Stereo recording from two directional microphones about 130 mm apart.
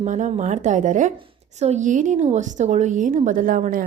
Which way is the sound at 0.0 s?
65° right (ahead or behind).